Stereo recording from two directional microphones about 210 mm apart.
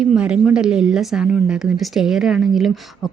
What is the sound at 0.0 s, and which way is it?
A woman's voice, 5° right (ahead or behind).